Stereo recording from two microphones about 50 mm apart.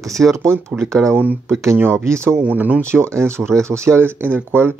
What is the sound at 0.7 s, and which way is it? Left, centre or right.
Speech, right.